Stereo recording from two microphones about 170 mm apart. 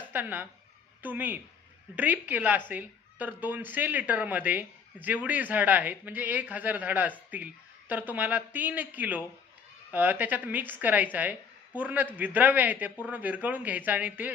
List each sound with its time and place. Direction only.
0.1 s speech: 10° right (ahead or behind)